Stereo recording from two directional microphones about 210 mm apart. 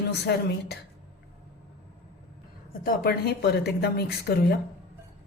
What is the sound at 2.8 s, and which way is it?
A woman's voice, 45° left (ahead or behind).